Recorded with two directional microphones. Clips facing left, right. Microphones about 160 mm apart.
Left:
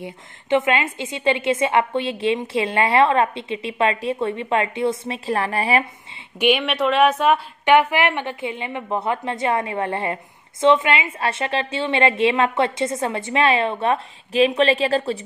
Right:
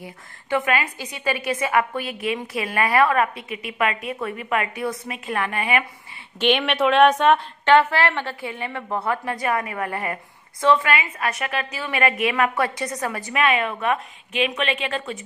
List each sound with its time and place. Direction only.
0.0 s a woman's voice: 20° left (ahead or behind)
6.4 s a woman's voice: 5° left (ahead or behind); by 15.1 s 35° left (ahead or behind)